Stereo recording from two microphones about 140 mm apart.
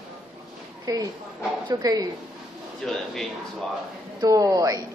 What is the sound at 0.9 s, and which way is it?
A woman's voice, 25° right (ahead or behind).